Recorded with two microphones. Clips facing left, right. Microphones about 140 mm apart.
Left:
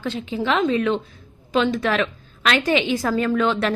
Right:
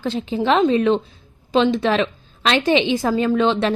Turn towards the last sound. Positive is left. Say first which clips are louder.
# right 3 dB
turn(degrees=-25)  # may be behind; listen again after turning